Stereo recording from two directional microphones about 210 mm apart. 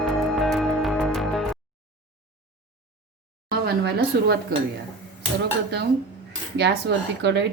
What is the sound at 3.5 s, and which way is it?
Speech, 50° right (ahead or behind).